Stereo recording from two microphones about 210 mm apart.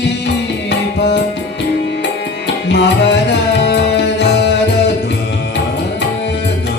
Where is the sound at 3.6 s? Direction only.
55° left (ahead or behind).